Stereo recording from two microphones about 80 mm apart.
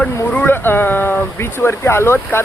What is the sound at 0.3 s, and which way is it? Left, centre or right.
Speech, left.